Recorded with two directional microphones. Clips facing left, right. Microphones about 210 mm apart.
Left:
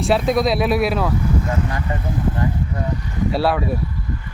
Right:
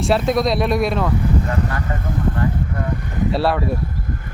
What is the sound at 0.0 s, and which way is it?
Speech, centre (ahead or behind).